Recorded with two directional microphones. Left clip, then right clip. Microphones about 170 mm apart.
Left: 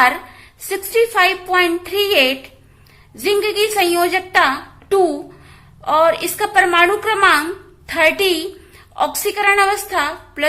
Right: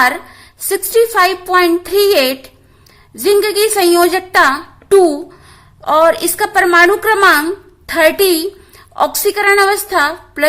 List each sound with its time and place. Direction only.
0.7 s a woman's voice: 35° right (ahead or behind)
3.4 s a woman's voice: 40° right (ahead or behind)